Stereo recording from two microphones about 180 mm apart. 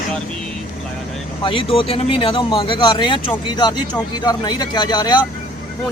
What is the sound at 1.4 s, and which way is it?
Speech, 30° left (ahead or behind).